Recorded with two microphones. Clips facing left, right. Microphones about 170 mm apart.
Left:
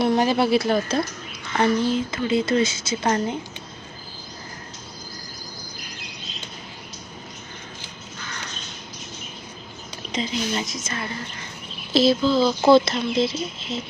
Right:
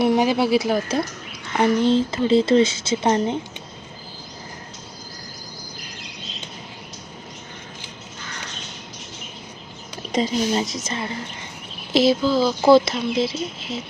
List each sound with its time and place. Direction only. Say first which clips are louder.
0.0 s speech: right 1 dB; 10° right (ahead or behind)
10.1 s speech: right 5 dB; 45° right (ahead or behind); by 11.4 s 25° right (ahead or behind)
11.9 s speech: right 1 dB; 10° right (ahead or behind)